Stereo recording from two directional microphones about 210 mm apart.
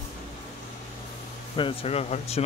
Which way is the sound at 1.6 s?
25° left (ahead or behind).